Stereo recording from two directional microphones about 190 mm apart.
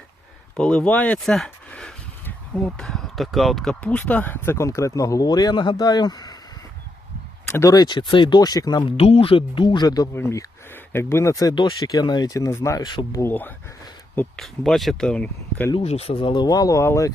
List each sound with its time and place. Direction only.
0.5 s speech: 5° left (ahead or behind); by 6.3 s 20° left (ahead or behind)
7.5 s speech: 15° left (ahead or behind)
14.2 s speech: centre (ahead or behind)
15.7 s speech: 35° left (ahead or behind); by 17.1 s 15° left (ahead or behind)